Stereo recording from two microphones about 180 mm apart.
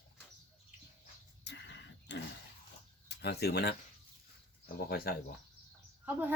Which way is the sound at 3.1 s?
65° left (ahead or behind).